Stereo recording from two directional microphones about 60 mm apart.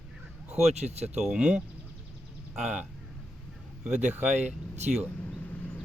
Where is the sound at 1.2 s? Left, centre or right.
Centre.